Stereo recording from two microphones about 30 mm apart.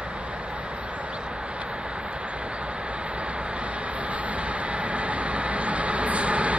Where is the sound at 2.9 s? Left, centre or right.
Right.